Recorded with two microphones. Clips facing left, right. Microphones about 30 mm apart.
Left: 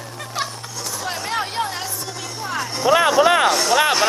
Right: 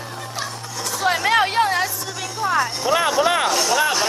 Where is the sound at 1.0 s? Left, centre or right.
Right.